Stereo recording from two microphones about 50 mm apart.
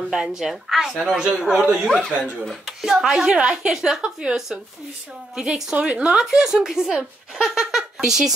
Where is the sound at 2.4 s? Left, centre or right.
Centre.